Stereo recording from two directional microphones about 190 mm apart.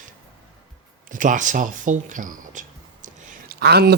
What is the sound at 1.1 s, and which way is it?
Speech, 45° right (ahead or behind).